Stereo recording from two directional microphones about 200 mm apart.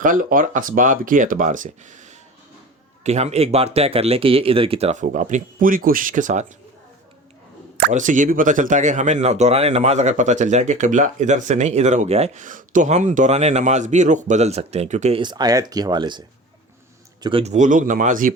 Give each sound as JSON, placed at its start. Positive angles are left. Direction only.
{"t": 0.0, "sound": "speech", "side_deg": -45}
{"t": 7.9, "sound": "speech", "side_deg": -40}
{"t": 15.2, "sound": "speech", "side_deg": -20}